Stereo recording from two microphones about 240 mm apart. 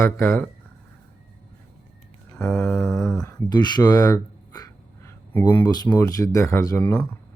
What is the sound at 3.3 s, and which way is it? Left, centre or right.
Speech, centre.